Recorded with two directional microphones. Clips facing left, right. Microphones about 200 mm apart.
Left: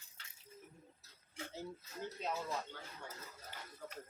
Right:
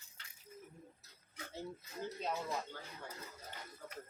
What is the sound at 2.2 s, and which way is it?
Speech, centre (ahead or behind).